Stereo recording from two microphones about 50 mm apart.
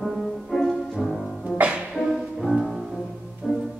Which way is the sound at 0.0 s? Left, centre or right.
Centre.